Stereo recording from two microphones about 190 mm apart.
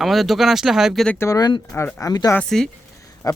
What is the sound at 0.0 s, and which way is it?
Speech, centre (ahead or behind).